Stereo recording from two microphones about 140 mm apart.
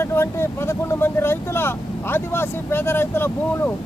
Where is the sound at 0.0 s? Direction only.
20° left (ahead or behind).